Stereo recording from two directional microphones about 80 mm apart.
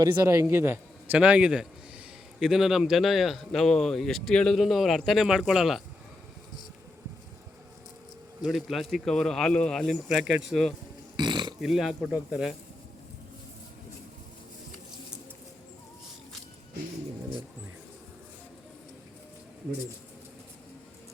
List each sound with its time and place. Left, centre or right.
0.0 s a man's voice: right
0.5 s a man's voice: right
1.2 s a man's voice: centre
8.4 s speech: centre
11.2 s burping: right
11.6 s speech: centre